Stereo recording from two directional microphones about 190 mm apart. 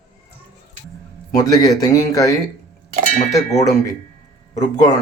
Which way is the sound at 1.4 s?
20° left (ahead or behind).